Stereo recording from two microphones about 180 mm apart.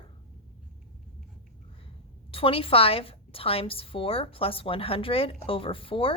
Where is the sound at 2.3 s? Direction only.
30° left (ahead or behind).